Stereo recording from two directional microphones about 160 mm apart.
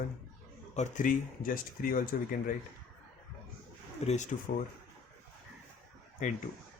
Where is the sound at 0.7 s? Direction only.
50° left (ahead or behind).